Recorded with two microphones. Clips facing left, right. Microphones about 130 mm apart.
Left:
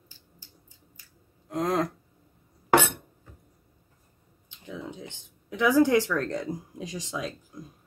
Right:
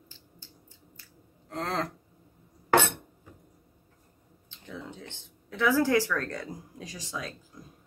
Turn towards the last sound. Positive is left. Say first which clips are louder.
# left 5 dB
turn(degrees=20)  # may be behind; listen again after turning